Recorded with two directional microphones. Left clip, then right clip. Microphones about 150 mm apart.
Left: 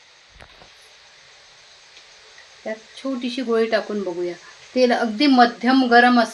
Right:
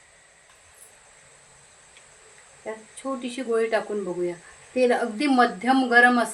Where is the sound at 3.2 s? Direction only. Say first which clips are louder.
Left 4 dB; 60° left (ahead or behind).